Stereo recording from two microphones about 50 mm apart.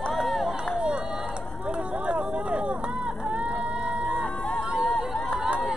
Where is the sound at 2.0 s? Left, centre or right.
Right.